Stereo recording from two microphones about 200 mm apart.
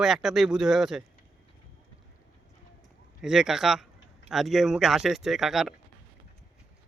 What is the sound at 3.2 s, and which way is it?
Speech, 5° right (ahead or behind).